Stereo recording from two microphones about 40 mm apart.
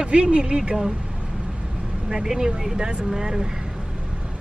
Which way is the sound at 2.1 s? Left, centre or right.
Centre.